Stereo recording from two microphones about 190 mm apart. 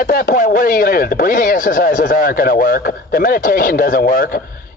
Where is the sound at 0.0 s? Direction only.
50° left (ahead or behind).